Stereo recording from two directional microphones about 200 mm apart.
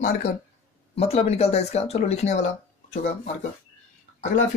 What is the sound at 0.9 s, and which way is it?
Speech, 30° left (ahead or behind).